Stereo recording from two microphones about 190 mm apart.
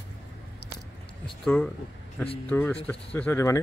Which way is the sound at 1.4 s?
5° left (ahead or behind).